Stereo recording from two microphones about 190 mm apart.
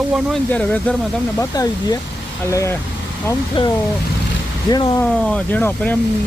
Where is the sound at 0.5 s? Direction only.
5° left (ahead or behind).